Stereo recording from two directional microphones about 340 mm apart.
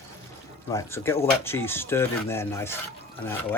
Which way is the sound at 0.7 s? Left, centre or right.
Centre.